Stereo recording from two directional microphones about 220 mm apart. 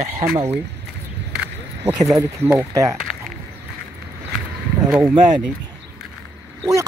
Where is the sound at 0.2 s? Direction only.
30° right (ahead or behind).